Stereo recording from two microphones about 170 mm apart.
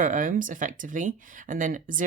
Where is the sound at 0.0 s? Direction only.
50° right (ahead or behind).